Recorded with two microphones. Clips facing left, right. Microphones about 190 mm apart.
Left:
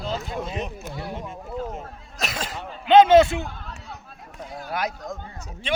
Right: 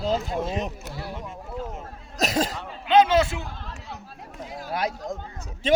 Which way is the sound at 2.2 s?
40° right (ahead or behind).